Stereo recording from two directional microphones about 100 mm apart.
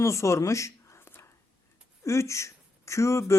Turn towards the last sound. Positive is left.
turn(degrees=30)  # may be behind; listen again after turning